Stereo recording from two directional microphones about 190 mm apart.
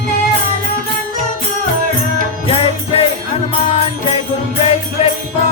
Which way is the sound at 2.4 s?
30° left (ahead or behind).